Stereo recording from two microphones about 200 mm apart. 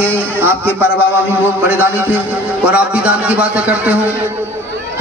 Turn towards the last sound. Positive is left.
turn(degrees=-5)  # may be behind; listen again after turning